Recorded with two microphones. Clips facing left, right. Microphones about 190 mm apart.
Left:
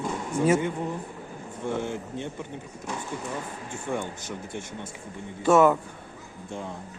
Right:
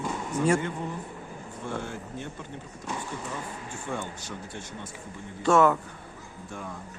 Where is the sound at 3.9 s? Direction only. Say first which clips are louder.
Left 4 dB; 15° left (ahead or behind).